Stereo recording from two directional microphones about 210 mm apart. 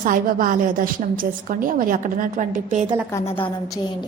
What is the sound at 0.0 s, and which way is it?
A woman's voice, 40° right (ahead or behind).